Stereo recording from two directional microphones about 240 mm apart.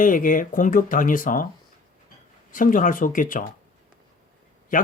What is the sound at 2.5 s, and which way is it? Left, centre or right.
Speech, left.